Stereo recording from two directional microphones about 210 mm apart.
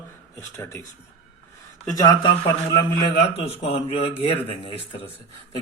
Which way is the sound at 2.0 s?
20° left (ahead or behind).